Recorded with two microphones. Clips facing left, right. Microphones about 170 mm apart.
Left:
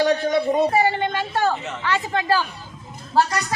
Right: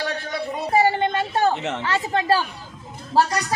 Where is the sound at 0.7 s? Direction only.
30° right (ahead or behind).